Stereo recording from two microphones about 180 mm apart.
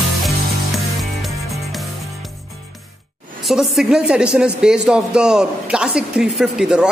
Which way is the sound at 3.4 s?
Centre (ahead or behind).